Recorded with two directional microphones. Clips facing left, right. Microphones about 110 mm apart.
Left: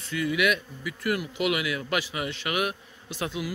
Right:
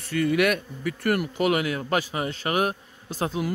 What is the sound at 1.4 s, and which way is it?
A man's voice, 40° right (ahead or behind).